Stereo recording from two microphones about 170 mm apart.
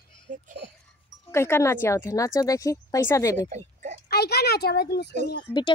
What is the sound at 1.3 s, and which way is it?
Speech, 15° left (ahead or behind).